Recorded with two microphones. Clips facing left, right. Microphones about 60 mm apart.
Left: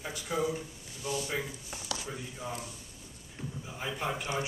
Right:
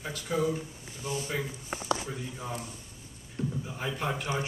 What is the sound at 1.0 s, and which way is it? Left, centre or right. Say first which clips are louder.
Speech: even; right.